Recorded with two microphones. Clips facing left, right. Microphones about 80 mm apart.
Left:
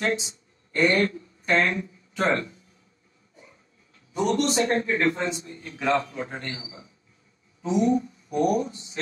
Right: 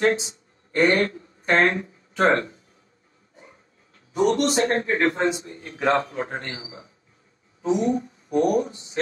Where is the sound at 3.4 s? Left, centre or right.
Right.